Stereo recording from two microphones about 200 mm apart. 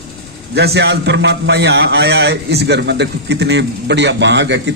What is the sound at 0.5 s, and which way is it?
A man's voice, 55° right (ahead or behind).